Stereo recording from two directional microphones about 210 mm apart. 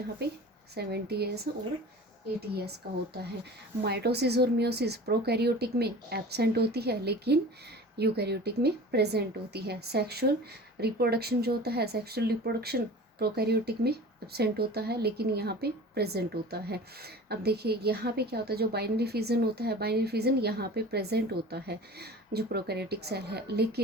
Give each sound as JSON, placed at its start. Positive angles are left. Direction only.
{"t": 0.2, "sound": "speech", "side_deg": -50}
{"t": 2.8, "sound": "speech", "side_deg": -50}